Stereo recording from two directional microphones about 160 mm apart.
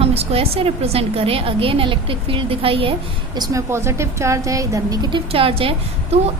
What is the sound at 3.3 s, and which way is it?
A woman's voice, 20° right (ahead or behind).